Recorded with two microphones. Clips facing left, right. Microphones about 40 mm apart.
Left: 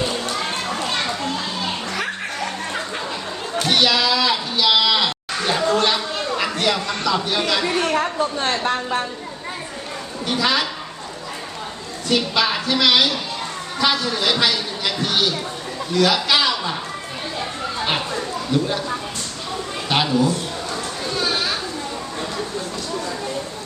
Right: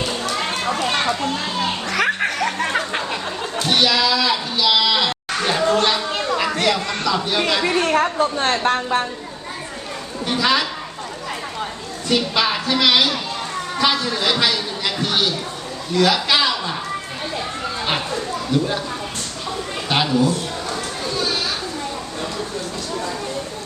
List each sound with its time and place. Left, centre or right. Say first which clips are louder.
0.3 s children playing: right 2 dB; right
1.9 s a sound: right 6 dB; right
2.6 s a sound: right 4 dB; right
3.6 s a sound: even; centre
7.6 s chatter: right 2 dB; centre
8.0 s a woman's voice: right 3 dB; centre
8.7 s a woman's voice: right 4 dB; right
10.3 s speech: right 2 dB; centre
12.0 s a man's voice: even; centre
17.8 s a sound: even; centre
19.9 s speech: even; centre
21.2 s children playing: left 1 dB; centre